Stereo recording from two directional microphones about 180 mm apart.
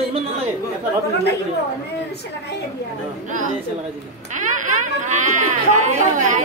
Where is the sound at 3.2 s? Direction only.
45° right (ahead or behind).